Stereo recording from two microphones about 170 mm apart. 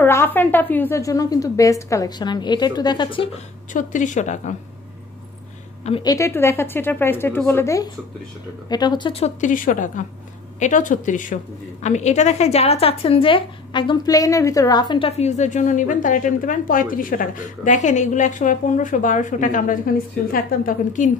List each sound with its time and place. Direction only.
0.0 s a woman's voice: 15° left (ahead or behind); by 3.3 s 30° left (ahead or behind)
3.7 s a woman's voice: 50° left (ahead or behind)
6.0 s a woman's voice: 20° left (ahead or behind)
9.2 s a woman's voice: 50° left (ahead or behind)